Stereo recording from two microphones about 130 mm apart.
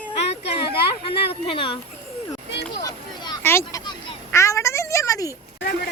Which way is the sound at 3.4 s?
20° left (ahead or behind).